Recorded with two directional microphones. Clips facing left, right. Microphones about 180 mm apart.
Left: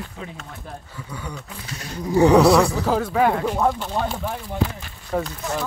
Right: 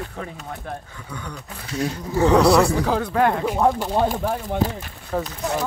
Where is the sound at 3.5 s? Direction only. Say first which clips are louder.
Right 2 dB; 15° right (ahead or behind).